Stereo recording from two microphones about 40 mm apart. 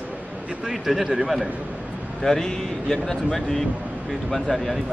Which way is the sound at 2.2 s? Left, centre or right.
Centre.